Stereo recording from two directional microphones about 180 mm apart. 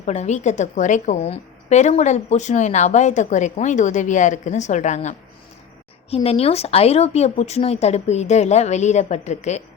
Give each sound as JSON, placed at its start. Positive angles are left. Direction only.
{"t": 0.0, "sound": "a woman's voice", "side_deg": 40}